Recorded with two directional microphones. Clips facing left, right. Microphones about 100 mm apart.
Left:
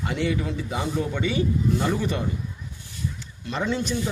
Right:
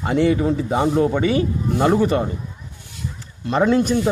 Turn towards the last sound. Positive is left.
turn(degrees=-50)  # may be behind; listen again after turning